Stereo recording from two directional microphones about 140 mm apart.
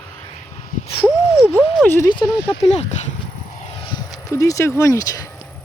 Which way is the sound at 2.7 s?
55° left (ahead or behind).